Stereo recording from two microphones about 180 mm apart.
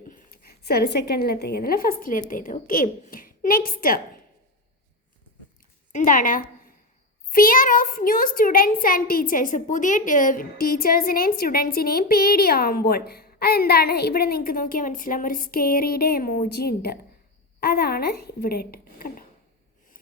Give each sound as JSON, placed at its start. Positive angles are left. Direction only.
{"t": 0.1, "sound": "a woman's voice", "side_deg": 60}
{"t": 5.9, "sound": "a woman's voice", "side_deg": 50}